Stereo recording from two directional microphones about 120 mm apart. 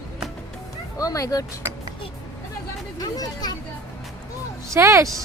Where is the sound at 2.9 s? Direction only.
30° left (ahead or behind).